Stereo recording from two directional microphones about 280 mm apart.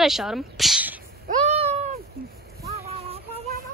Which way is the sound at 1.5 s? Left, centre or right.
Right.